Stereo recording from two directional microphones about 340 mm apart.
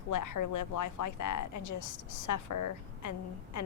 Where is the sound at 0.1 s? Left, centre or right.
Left.